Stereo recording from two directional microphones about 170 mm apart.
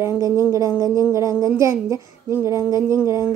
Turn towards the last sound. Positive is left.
turn(degrees=-15)  # may be behind; listen again after turning